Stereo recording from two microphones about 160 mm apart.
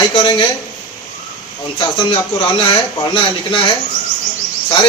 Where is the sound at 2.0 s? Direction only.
30° left (ahead or behind).